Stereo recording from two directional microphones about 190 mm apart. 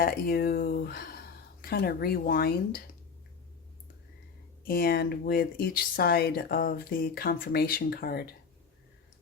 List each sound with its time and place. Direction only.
0.0 s speech: 50° left (ahead or behind)
4.6 s speech: 50° left (ahead or behind)